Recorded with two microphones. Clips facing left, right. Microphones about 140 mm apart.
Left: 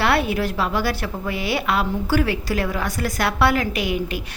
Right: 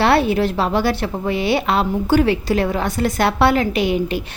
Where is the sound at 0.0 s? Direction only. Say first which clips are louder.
Right 5 dB; 30° right (ahead or behind).